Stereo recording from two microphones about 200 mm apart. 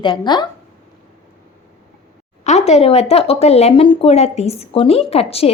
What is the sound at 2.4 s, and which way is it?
A woman's voice, 35° left (ahead or behind).